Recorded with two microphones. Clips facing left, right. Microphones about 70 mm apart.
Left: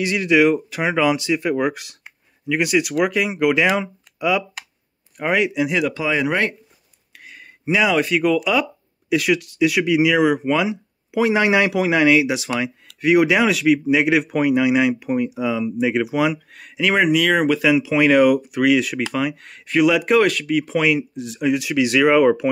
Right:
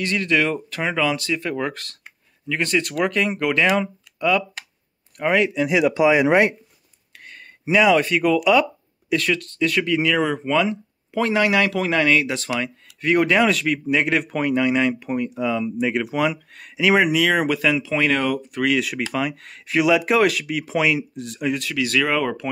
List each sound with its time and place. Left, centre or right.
0.0 s speech: centre
5.7 s speech: centre
7.2 s speech: centre
17.7 s speech: centre
21.6 s speech: centre